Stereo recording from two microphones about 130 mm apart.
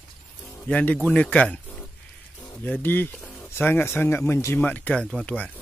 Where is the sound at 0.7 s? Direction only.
10° left (ahead or behind).